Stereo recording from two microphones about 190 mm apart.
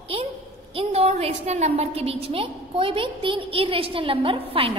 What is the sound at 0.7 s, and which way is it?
A woman's voice, 35° right (ahead or behind).